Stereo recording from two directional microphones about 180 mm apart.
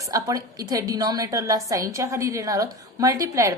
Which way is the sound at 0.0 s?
20° right (ahead or behind).